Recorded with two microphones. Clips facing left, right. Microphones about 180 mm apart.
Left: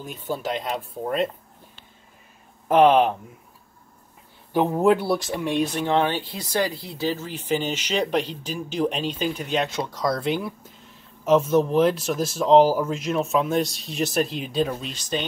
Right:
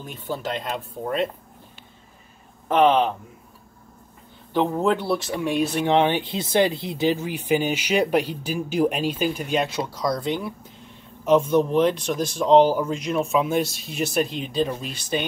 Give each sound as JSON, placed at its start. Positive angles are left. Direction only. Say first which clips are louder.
{"t": 0.3, "sound": "speech", "louder": "left 1 dB", "side_deg": 5}
{"t": 2.7, "sound": "speech", "louder": "left 2 dB", "side_deg": 10}
{"t": 4.5, "sound": "speech", "louder": "left 2 dB", "side_deg": 10}
{"t": 5.9, "sound": "speech", "louder": "right 3 dB", "side_deg": -20}